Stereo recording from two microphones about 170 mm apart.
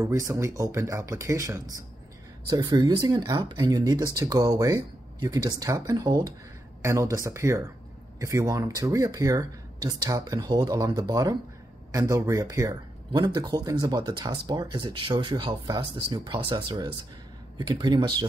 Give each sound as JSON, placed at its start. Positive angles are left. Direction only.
{"t": 0.0, "sound": "speech", "side_deg": -15}